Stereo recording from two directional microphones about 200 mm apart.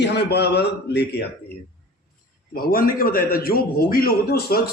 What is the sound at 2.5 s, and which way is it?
A man's voice, 45° left (ahead or behind).